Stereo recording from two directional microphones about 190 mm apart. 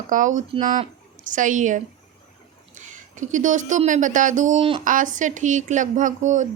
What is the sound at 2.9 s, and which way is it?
A woman's voice, 40° right (ahead or behind).